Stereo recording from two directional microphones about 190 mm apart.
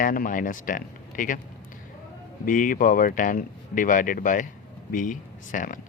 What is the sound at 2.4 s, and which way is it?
Speech, 45° left (ahead or behind).